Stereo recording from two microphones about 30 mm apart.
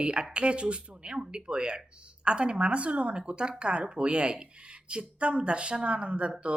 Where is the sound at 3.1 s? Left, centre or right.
Right.